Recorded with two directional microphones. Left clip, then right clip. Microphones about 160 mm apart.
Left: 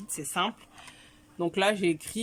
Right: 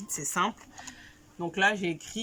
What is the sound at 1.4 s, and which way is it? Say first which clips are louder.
Speech: left 1 dB; 30° left (ahead or behind).